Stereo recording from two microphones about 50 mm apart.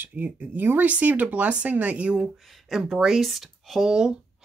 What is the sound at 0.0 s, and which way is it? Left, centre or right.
Speech, right.